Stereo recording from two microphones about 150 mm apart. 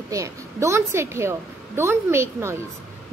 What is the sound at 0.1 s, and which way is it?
A woman's voice, 20° right (ahead or behind).